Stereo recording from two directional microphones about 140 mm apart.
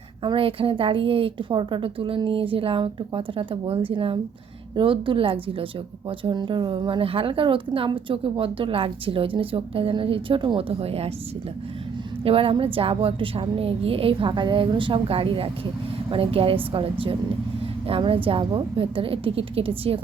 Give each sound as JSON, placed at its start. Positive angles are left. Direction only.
{"t": 0.2, "sound": "a woman's voice", "side_deg": -40}
{"t": 12.2, "sound": "a woman's voice", "side_deg": -40}